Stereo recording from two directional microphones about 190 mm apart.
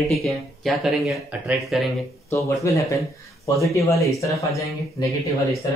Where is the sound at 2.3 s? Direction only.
15° left (ahead or behind).